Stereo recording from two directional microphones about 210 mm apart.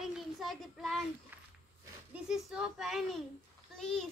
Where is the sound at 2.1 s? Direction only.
5° right (ahead or behind).